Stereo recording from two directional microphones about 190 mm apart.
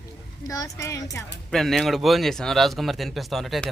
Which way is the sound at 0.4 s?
15° left (ahead or behind).